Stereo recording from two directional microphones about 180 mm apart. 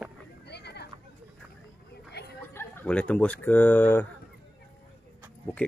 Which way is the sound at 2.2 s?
70° left (ahead or behind).